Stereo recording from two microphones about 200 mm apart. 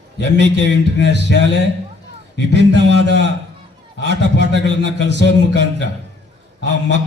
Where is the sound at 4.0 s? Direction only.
60° left (ahead or behind).